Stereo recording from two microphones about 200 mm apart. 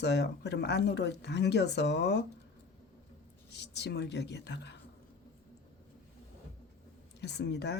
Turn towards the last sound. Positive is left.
turn(degrees=60)  # may be behind; listen again after turning